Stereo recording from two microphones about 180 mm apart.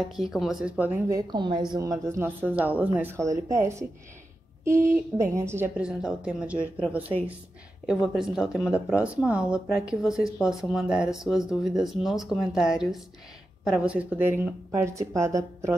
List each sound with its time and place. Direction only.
0.0 s speech: centre (ahead or behind)
8.1 s speech: 5° right (ahead or behind)